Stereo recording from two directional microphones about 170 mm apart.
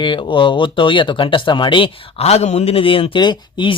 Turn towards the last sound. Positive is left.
turn(degrees=25)  # may be behind; listen again after turning